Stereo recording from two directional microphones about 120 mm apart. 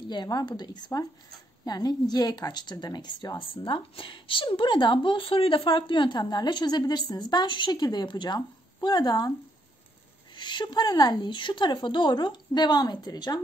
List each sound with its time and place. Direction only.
0.1 s a woman's voice: 35° left (ahead or behind)
10.3 s a woman's voice: 40° left (ahead or behind)